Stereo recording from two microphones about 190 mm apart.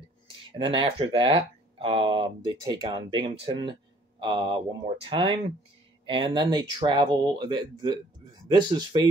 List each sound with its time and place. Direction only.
0.3 s speech: 25° right (ahead or behind)